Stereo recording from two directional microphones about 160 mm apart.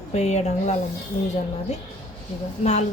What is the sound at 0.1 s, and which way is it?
Speech, 45° left (ahead or behind).